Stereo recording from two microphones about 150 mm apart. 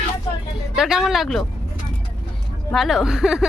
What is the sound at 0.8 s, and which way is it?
Speech, 5° right (ahead or behind).